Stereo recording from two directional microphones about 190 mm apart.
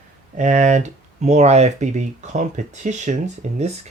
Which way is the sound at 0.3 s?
40° right (ahead or behind).